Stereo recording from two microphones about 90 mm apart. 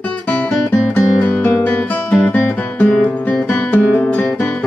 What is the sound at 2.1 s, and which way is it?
Music, 15° left (ahead or behind).